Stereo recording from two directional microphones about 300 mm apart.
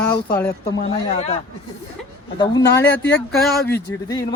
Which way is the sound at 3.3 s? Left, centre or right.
Centre.